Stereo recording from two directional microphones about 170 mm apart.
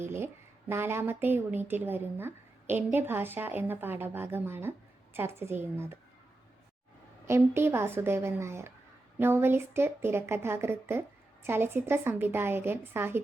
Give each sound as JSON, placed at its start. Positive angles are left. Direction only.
{"t": 0.7, "sound": "a woman's voice", "side_deg": -15}
{"t": 7.3, "sound": "a woman's voice", "side_deg": -15}